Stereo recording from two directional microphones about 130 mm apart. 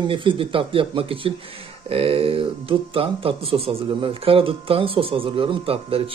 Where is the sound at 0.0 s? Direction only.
40° right (ahead or behind).